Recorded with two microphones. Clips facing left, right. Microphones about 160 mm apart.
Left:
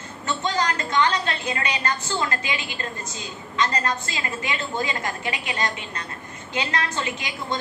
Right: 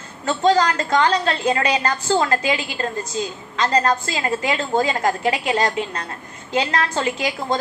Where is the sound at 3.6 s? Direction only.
35° right (ahead or behind).